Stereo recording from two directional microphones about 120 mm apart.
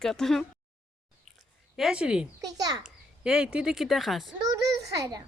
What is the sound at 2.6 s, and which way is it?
Speech, 35° right (ahead or behind).